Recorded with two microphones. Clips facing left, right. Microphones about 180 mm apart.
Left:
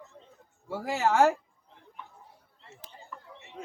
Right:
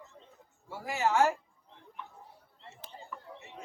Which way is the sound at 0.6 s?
85° left.